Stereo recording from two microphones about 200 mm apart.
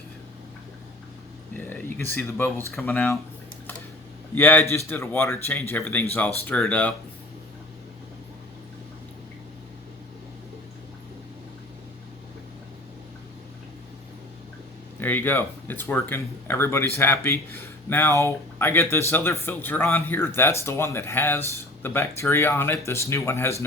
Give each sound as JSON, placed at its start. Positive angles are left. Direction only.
{"t": 1.5, "sound": "speech", "side_deg": 10}
{"t": 4.4, "sound": "speech", "side_deg": 10}
{"t": 14.9, "sound": "speech", "side_deg": 10}